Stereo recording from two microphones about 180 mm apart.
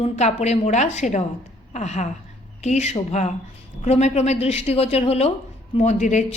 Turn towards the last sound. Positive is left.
turn(degrees=40)  # may be behind; listen again after turning